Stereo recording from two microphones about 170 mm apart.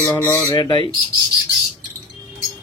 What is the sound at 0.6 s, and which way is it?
Speech, 25° left (ahead or behind).